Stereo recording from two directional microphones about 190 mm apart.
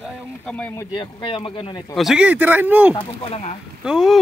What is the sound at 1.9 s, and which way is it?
Speech, centre (ahead or behind).